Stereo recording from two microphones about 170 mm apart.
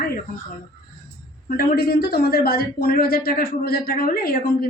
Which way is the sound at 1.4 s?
65° left (ahead or behind).